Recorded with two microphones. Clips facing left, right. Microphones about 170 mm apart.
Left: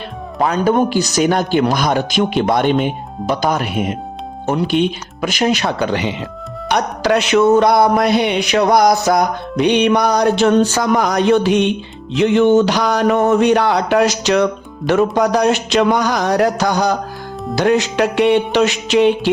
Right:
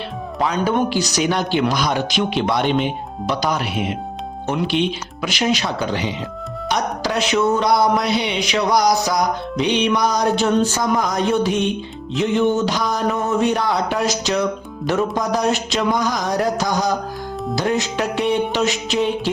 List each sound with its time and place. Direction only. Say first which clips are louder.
0.3 s speech: left 5 dB; 50° left (ahead or behind); by 6.1 s 65° left (ahead or behind)
6.7 s music: left 6 dB; 65° left (ahead or behind)